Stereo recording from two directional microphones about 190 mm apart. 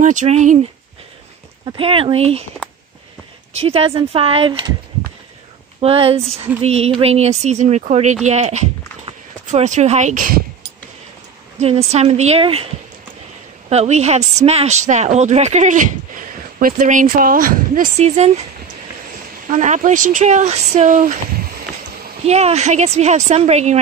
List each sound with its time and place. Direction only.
0.0 s a woman's voice: 40° right (ahead or behind)
1.7 s speech: 30° right (ahead or behind)
3.5 s speech: 30° right (ahead or behind)
5.8 s a woman's voice: 30° right (ahead or behind); by 10.7 s 50° right (ahead or behind)
11.6 s a woman's voice: 35° right (ahead or behind)
13.7 s a woman's voice: 35° right (ahead or behind)
19.4 s a woman's voice: 40° right (ahead or behind)